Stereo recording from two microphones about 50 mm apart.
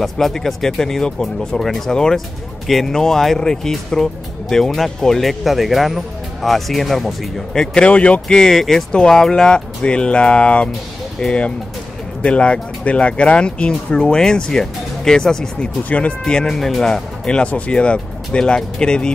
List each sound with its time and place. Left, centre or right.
0.0 s speech: centre
7.5 s speech: centre
8.3 s speech: centre
15.9 s speech: left
16.3 s speech: centre
17.4 s speech: left